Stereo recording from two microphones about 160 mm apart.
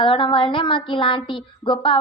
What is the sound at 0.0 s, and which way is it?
Speech, 30° left (ahead or behind).